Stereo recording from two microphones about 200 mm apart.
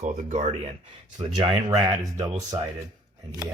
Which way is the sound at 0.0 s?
35° right (ahead or behind).